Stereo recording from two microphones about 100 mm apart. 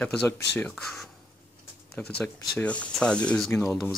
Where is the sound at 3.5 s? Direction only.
25° left (ahead or behind).